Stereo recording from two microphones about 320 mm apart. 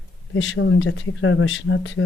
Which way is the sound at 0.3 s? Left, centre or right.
Left.